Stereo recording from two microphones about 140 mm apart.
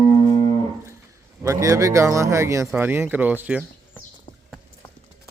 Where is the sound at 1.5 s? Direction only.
20° right (ahead or behind).